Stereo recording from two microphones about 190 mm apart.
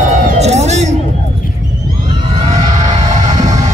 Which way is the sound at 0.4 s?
35° right (ahead or behind).